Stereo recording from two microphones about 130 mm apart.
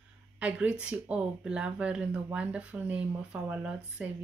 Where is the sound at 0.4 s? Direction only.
10° right (ahead or behind).